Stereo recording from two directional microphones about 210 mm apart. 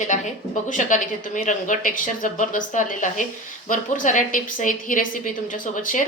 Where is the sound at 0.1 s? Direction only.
35° left (ahead or behind).